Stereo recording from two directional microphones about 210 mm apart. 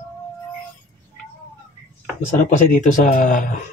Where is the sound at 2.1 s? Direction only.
35° left (ahead or behind).